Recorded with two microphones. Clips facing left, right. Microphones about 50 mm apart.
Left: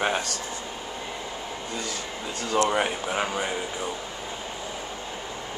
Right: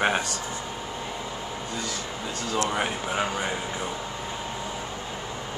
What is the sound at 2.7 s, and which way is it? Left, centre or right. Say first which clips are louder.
Speech: left 2 dB; centre.